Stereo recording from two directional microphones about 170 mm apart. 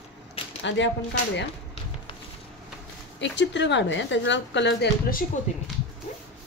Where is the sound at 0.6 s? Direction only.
90° left.